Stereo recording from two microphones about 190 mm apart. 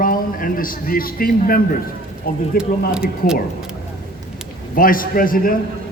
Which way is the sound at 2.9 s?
5° right (ahead or behind).